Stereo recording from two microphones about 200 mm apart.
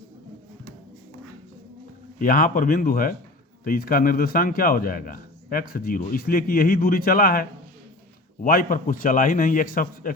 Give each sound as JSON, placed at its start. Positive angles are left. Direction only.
{"t": 2.1, "sound": "a man's voice", "side_deg": 45}